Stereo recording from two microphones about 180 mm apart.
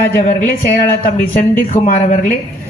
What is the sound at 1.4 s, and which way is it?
Speech, 45° left (ahead or behind).